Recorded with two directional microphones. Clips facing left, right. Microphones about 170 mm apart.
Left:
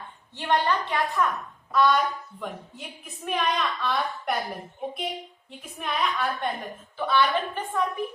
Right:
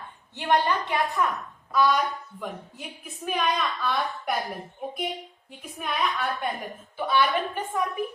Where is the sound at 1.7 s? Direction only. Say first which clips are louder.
Left 1 dB; 5° right (ahead or behind).